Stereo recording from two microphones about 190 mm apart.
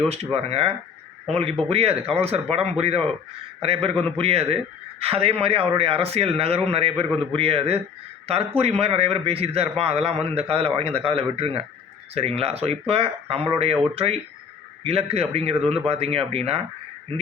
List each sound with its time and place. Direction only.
0.3 s a man's voice: 30° right (ahead or behind)